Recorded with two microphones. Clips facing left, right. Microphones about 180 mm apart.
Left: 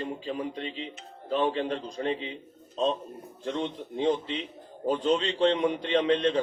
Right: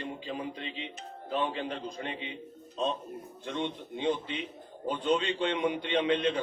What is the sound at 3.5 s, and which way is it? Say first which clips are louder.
Speech: left 3 dB; 35° left (ahead or behind).